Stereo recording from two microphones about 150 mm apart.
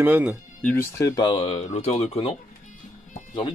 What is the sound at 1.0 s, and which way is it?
Speech, 30° left (ahead or behind).